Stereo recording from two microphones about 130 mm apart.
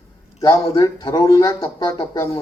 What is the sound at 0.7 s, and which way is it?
Speech, 35° left (ahead or behind).